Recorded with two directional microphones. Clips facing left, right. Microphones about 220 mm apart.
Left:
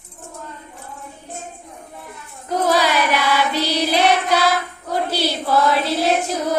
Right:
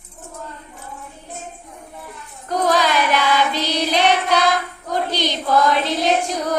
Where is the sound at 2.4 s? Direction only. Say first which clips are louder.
Even; 10° left (ahead or behind).